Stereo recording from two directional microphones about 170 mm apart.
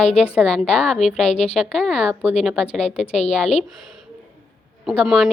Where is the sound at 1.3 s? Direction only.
40° left (ahead or behind).